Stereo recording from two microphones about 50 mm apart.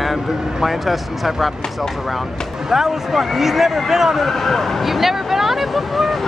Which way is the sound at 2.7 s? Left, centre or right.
Centre.